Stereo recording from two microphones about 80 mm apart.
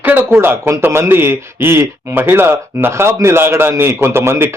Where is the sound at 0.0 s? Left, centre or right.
Right.